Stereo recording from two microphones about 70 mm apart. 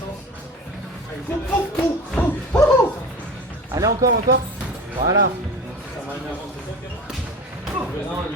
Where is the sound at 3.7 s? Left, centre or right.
Right.